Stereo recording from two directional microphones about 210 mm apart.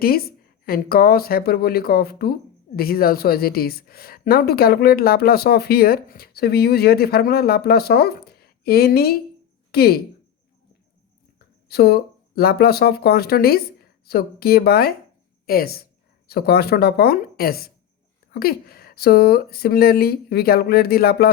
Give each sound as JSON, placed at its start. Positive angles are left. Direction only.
{"t": 0.0, "sound": "a woman's voice", "side_deg": 45}
{"t": 11.3, "sound": "a woman's voice", "side_deg": 50}